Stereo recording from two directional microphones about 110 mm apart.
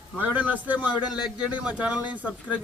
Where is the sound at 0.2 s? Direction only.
15° right (ahead or behind).